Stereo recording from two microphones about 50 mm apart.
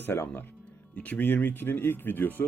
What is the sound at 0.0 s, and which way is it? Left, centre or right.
Speech, left.